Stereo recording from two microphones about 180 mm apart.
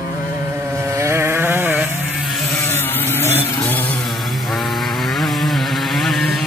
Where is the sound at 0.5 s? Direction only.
15° right (ahead or behind).